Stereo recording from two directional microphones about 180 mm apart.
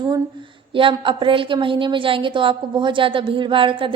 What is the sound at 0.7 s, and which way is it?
A woman's voice, 30° right (ahead or behind).